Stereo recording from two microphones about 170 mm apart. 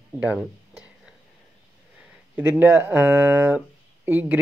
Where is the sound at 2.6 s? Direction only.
10° right (ahead or behind).